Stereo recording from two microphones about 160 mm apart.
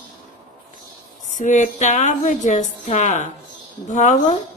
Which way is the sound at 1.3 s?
50° left (ahead or behind).